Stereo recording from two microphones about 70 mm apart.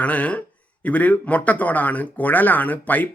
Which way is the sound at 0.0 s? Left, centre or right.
Centre.